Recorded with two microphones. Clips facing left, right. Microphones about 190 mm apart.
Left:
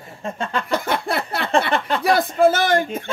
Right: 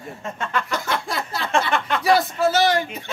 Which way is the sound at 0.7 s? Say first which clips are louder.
Left 4 dB; 60° left (ahead or behind).